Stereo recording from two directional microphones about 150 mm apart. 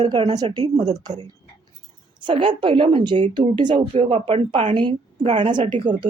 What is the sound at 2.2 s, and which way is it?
A woman's voice, 35° right (ahead or behind).